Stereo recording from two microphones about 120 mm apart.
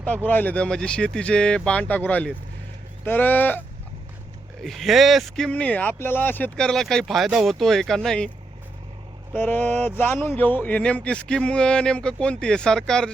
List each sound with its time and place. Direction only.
0.3 s a man's voice: 15° left (ahead or behind)
4.6 s speech: centre (ahead or behind)
5.5 s speech: 10° left (ahead or behind)
9.3 s a man's voice: 15° left (ahead or behind)